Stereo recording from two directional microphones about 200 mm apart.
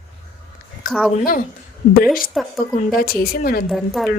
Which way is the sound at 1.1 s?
45° left (ahead or behind).